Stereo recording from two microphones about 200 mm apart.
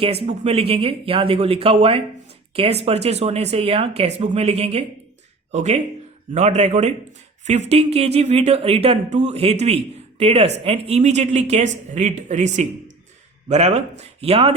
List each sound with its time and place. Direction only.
0.0 s speech: 30° right (ahead or behind)